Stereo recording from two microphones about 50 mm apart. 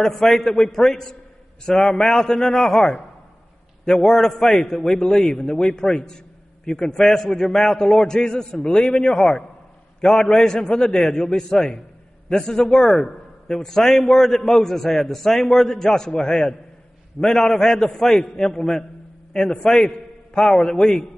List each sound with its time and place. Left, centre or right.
0.0 s a man's voice: centre